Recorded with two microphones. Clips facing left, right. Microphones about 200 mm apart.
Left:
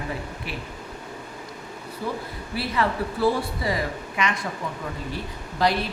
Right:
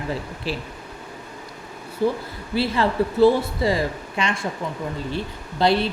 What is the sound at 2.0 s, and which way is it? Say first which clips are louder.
Speech: right 8 dB; 30° right (ahead or behind).